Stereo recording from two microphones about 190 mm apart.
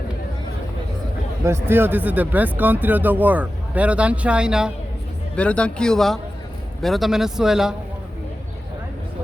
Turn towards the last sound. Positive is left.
turn(degrees=-5)  # may be behind; listen again after turning